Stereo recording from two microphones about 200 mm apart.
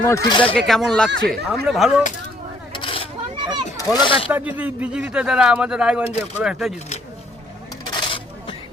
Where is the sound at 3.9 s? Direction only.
25° left (ahead or behind).